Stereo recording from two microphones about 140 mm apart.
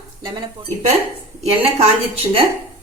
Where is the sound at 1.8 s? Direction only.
45° right (ahead or behind).